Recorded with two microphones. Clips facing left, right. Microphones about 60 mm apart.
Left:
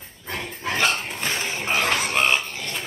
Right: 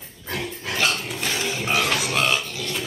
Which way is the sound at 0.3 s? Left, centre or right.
Left.